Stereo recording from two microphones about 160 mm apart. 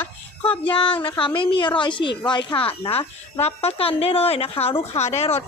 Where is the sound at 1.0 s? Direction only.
30° left (ahead or behind).